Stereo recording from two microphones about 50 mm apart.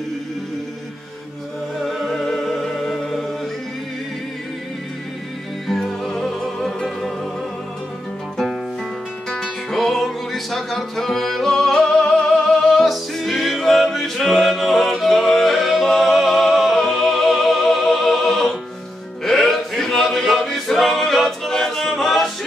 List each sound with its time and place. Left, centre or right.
1.8 s music: centre
5.7 s music: centre
9.4 s music: centre
19.2 s male singing: centre